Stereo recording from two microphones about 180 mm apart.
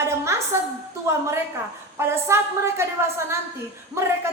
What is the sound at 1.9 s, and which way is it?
A woman's voice, 15° right (ahead or behind).